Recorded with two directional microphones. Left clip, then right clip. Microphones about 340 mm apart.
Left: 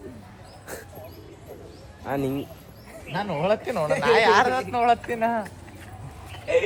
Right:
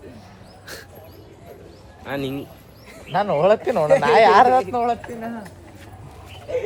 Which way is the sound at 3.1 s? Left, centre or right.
Right.